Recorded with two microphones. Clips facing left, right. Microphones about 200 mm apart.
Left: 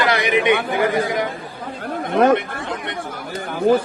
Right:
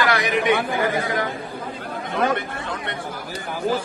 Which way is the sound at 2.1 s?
55° left (ahead or behind).